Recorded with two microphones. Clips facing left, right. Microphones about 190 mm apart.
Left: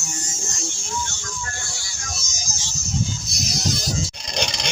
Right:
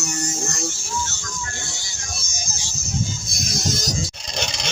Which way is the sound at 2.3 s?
60° right (ahead or behind).